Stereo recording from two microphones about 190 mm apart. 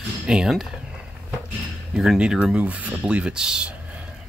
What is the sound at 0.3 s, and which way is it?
Speech, centre (ahead or behind).